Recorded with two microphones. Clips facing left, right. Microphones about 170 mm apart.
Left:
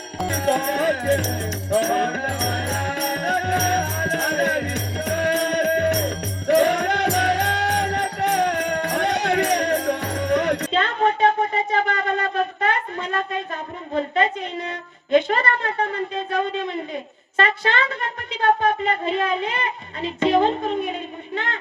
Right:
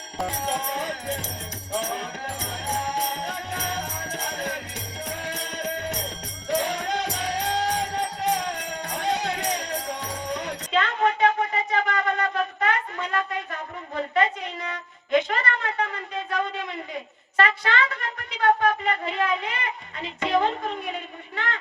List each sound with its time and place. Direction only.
0.3 s music: 60° left (ahead or behind)
10.7 s wind instrument: 30° left (ahead or behind)
17.3 s a sound: 25° left (ahead or behind)